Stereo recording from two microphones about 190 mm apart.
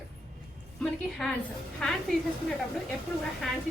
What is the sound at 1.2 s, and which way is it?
Speech, centre (ahead or behind).